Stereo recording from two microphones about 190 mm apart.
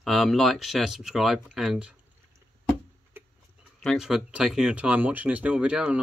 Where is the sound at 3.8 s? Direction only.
Centre (ahead or behind).